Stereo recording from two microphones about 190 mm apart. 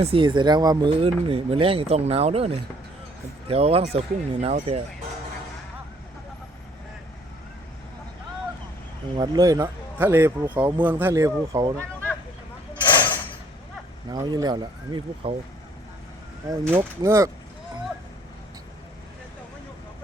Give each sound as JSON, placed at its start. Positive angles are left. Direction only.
{"t": 0.0, "sound": "speech", "side_deg": -30}
{"t": 9.1, "sound": "a man's voice", "side_deg": -20}
{"t": 12.7, "sound": "a sound", "side_deg": 25}
{"t": 14.1, "sound": "speech", "side_deg": -20}
{"t": 16.5, "sound": "a man's voice", "side_deg": -15}